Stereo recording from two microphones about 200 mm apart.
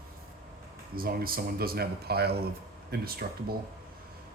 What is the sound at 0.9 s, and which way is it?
Speech, 45° right (ahead or behind).